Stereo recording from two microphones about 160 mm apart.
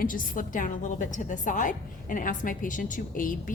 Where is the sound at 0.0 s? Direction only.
60° left (ahead or behind).